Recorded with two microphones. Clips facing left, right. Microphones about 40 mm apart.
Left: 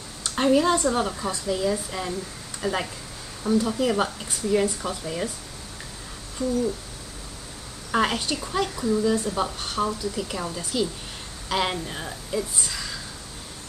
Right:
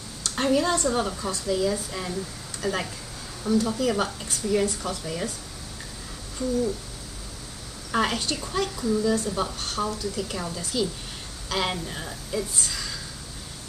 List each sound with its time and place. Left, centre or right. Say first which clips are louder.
0.2 s a woman's voice: left 3 dB; centre
6.4 s speech: left 1 dB; left
7.9 s a woman's voice: left 2 dB; centre